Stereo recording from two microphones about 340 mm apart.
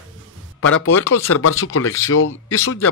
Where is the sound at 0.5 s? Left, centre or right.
Left.